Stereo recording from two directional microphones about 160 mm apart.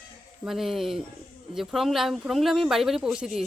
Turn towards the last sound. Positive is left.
turn(degrees=-5)  # may be behind; listen again after turning